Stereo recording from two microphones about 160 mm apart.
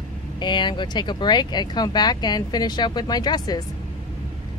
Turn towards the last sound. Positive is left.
turn(degrees=25)  # may be behind; listen again after turning